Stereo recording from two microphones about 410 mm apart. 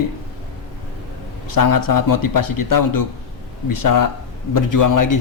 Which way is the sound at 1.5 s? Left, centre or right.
Left.